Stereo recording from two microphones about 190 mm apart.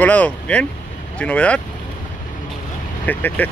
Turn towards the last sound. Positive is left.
turn(degrees=10)  # may be behind; listen again after turning